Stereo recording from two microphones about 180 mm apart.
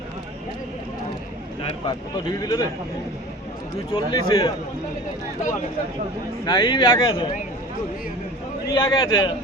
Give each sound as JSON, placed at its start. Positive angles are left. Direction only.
{"t": 1.6, "sound": "speech", "side_deg": 25}
{"t": 3.9, "sound": "speech", "side_deg": 30}
{"t": 6.4, "sound": "speech", "side_deg": 25}
{"t": 8.6, "sound": "speech", "side_deg": 25}